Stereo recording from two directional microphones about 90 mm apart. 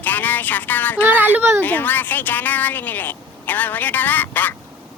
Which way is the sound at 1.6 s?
20° left (ahead or behind).